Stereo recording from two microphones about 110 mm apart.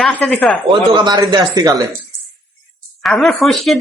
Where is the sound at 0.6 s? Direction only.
35° right (ahead or behind).